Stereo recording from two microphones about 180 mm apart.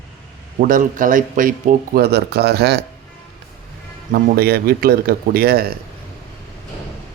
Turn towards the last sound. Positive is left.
turn(degrees=-55)  # may be behind; listen again after turning